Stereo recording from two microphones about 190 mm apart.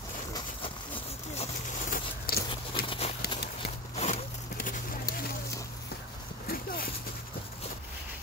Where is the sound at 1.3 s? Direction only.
40° left (ahead or behind).